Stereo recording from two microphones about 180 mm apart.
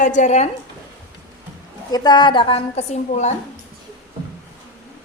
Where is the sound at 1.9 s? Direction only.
20° left (ahead or behind); by 3.3 s 40° left (ahead or behind).